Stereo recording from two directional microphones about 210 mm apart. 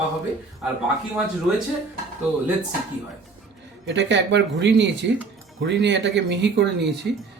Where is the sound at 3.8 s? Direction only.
55° right (ahead or behind).